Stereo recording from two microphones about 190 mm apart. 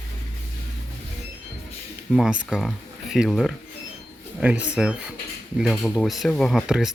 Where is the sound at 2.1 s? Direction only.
5° right (ahead or behind).